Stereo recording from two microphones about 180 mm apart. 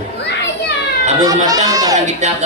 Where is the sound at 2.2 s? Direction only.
40° right (ahead or behind).